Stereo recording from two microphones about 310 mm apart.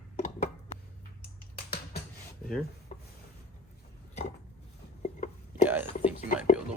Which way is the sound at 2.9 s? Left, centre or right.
Left.